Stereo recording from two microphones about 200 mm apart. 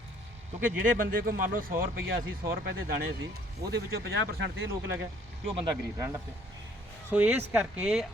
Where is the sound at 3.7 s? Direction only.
55° right (ahead or behind).